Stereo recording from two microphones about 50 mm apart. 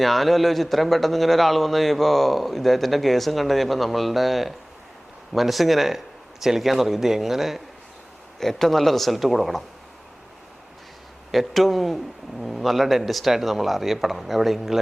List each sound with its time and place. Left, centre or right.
0.0 s speech: centre
8.4 s speech: centre
11.3 s speech: centre